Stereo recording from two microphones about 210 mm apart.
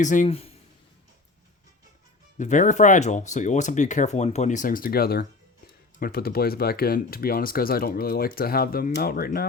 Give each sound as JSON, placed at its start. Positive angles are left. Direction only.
{"t": 0.0, "sound": "speech", "side_deg": 35}
{"t": 2.4, "sound": "speech", "side_deg": 35}